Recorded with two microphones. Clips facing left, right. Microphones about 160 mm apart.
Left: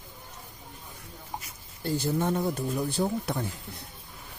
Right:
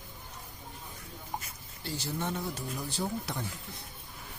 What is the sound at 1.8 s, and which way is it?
Speech, 55° left (ahead or behind).